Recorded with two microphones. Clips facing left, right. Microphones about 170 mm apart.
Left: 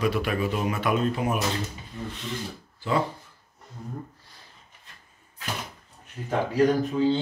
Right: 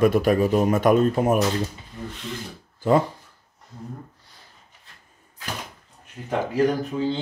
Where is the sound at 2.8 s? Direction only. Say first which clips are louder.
Right 7 dB; 45° right (ahead or behind).